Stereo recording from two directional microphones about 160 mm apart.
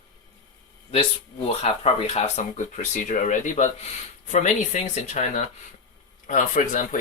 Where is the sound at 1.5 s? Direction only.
40° left (ahead or behind).